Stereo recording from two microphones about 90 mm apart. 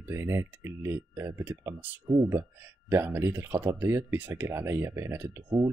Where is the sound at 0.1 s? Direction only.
30° right (ahead or behind).